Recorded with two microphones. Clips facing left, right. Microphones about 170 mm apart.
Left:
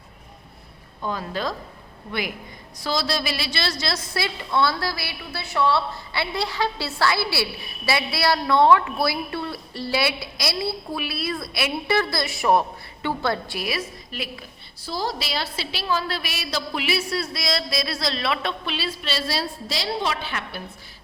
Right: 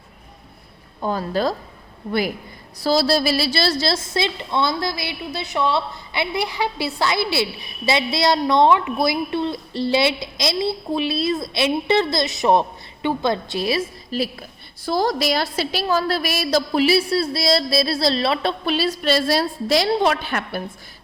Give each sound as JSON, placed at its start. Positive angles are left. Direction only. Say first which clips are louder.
{"t": 1.0, "sound": "a woman's voice", "louder": "right 6 dB", "side_deg": -40}
{"t": 2.8, "sound": "a woman's voice", "louder": "right 8 dB", "side_deg": -35}
{"t": 14.8, "sound": "a woman's voice", "louder": "right 8 dB", "side_deg": -50}